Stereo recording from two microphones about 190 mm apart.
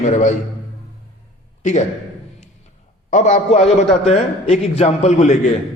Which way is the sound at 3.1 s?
35° left (ahead or behind).